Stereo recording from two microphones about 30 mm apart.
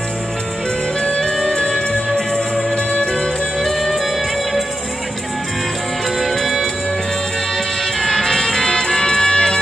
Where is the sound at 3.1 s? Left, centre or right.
Centre.